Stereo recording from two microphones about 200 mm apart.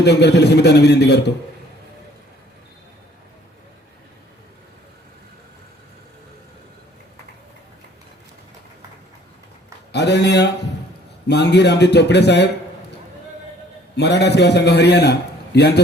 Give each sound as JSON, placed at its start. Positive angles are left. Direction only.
{"t": 0.0, "sound": "a man's voice", "side_deg": 55}
{"t": 9.9, "sound": "a man's voice", "side_deg": 55}
{"t": 13.9, "sound": "a man's voice", "side_deg": 55}